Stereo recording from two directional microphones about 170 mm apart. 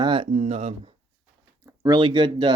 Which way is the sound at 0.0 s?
30° right (ahead or behind).